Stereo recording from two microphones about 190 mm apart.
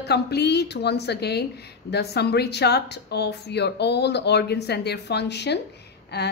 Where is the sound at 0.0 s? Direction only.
60° left (ahead or behind).